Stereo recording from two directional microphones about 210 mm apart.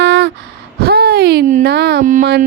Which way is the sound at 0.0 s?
55° right (ahead or behind).